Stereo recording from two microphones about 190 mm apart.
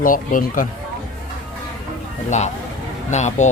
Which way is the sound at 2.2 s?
40° left (ahead or behind).